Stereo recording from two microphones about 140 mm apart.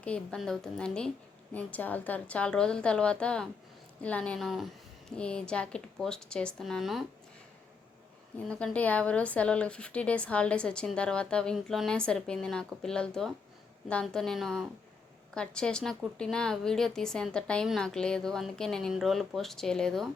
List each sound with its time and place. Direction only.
0.0 s a woman's voice: 10° left (ahead or behind)
8.4 s a woman's voice: 5° left (ahead or behind)